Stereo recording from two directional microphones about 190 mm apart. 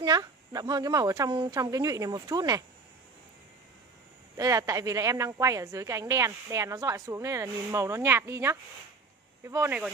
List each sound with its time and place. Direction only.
0.0 s a woman's voice: 20° right (ahead or behind)
4.4 s a woman's voice: 20° right (ahead or behind)